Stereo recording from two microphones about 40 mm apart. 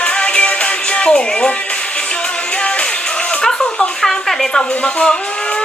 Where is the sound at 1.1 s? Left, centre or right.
Left.